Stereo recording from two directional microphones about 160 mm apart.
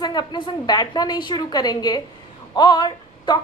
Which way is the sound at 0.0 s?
25° left (ahead or behind).